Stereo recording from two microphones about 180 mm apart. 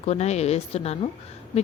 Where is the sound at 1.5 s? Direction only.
35° left (ahead or behind).